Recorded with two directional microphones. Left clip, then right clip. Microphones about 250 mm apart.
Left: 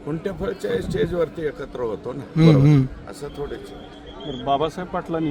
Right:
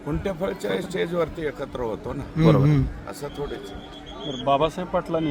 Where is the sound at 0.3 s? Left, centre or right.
Centre.